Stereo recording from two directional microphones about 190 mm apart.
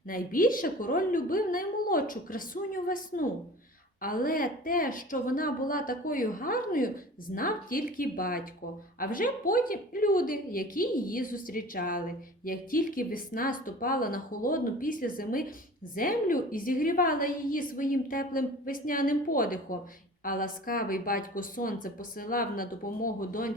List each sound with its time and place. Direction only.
0.1 s a woman's voice: 45° left (ahead or behind)